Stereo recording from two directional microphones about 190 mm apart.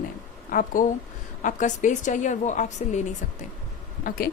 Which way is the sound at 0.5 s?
45° left (ahead or behind).